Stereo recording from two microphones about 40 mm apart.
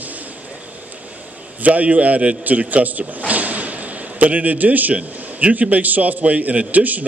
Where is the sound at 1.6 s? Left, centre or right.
Right.